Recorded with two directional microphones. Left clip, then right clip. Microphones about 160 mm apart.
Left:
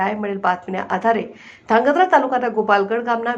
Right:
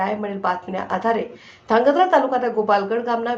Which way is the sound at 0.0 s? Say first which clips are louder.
Left 2 dB; 15° left (ahead or behind).